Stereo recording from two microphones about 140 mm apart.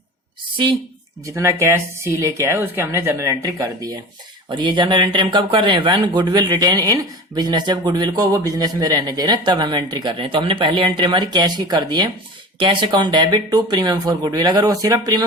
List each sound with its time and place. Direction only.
0.5 s speech: 35° right (ahead or behind)
1.2 s speech: 20° right (ahead or behind)